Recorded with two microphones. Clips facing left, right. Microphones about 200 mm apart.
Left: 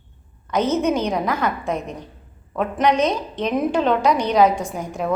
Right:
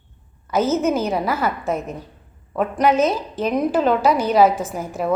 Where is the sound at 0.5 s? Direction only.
5° right (ahead or behind).